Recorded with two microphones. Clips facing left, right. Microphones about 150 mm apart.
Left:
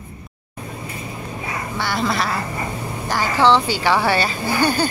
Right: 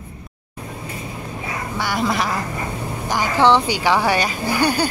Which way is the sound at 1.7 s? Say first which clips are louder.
Right 1 dB; 10° right (ahead or behind).